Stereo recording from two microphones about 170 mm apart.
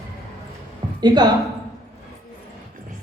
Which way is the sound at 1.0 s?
25° right (ahead or behind).